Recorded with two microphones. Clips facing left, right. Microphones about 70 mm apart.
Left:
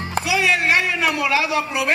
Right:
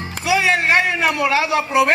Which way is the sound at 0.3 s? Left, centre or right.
Right.